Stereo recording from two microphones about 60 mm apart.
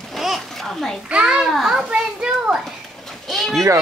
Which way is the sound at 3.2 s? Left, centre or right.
Centre.